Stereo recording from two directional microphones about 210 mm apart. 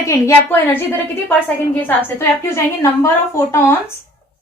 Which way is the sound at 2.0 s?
10° left (ahead or behind).